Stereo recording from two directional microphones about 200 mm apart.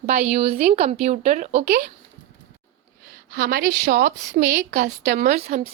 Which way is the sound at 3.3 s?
50° right (ahead or behind).